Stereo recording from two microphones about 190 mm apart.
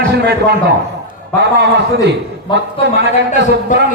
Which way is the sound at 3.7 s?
40° left (ahead or behind).